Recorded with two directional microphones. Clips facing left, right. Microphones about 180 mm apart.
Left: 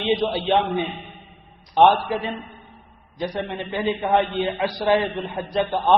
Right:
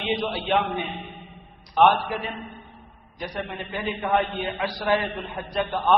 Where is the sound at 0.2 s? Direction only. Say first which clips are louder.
Left 5 dB; 30° left (ahead or behind).